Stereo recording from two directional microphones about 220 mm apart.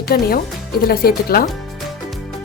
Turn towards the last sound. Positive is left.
turn(degrees=45)  # may be behind; listen again after turning